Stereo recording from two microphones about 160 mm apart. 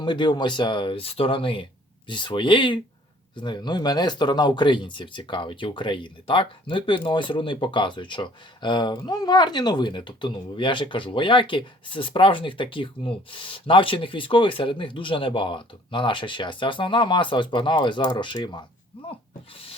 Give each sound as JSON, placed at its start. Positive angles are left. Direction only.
{"t": 0.0, "sound": "speech", "side_deg": 30}